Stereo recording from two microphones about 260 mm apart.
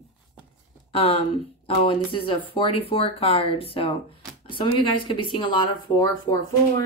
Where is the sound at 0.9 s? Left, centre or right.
Left.